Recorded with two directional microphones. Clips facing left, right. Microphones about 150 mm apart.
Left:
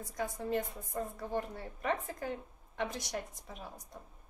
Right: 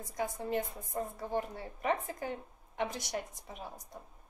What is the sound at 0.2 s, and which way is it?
A woman's voice, 20° right (ahead or behind).